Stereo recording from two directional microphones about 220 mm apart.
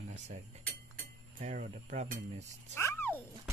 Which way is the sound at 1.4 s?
35° right (ahead or behind).